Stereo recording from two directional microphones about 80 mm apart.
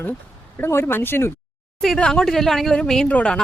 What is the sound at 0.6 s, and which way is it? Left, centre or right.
Speech, left.